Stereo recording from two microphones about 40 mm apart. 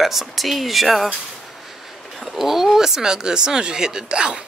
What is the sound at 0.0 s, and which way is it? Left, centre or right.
Speech, centre.